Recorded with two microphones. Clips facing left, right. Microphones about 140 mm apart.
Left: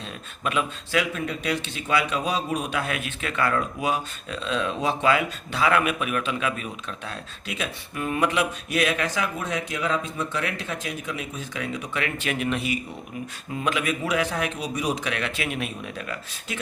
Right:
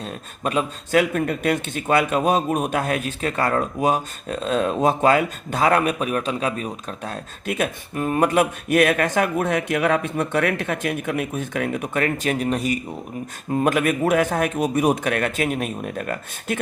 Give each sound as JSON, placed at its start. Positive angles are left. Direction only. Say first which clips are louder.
{"t": 0.0, "sound": "speech", "louder": "right 4 dB", "side_deg": -40}